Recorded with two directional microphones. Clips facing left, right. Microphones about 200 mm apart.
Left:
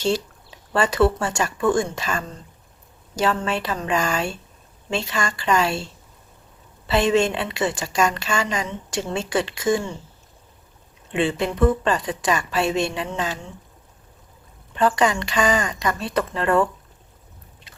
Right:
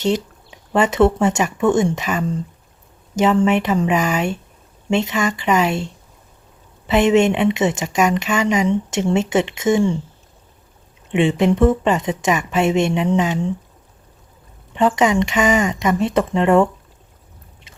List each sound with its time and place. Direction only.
0.0 s speech: 20° right (ahead or behind)
3.4 s a woman's voice: 20° right (ahead or behind)
11.1 s a woman's voice: 20° right (ahead or behind)
14.8 s a woman's voice: 20° right (ahead or behind)